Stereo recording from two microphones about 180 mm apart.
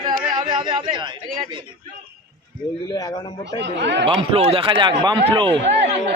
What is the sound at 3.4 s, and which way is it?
Speech, 75° right (ahead or behind).